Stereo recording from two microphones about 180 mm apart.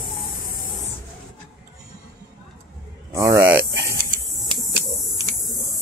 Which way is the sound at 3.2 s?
15° right (ahead or behind).